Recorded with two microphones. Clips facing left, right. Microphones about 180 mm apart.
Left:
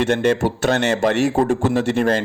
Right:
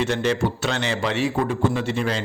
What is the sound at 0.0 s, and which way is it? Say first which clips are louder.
A man's voice: left 5 dB; 55° left (ahead or behind).